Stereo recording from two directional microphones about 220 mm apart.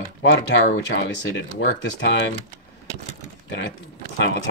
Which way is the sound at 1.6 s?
55° left (ahead or behind).